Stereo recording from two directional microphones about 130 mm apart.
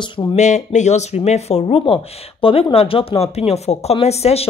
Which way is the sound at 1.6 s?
40° left (ahead or behind).